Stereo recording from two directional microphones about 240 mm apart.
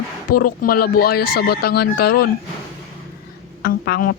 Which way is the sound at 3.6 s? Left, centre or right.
Left.